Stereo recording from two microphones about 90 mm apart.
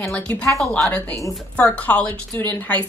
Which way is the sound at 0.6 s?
5° left (ahead or behind).